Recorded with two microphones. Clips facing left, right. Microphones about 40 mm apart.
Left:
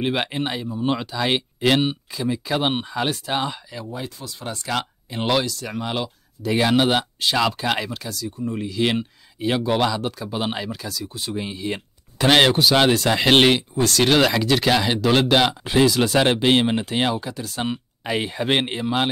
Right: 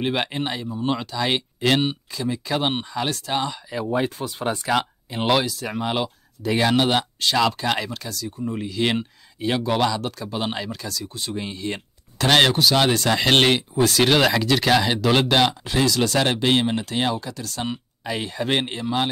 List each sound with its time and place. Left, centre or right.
0.0 s speech: centre
3.9 s speech: right
4.6 s speech: centre
13.6 s speech: centre
15.6 s speech: centre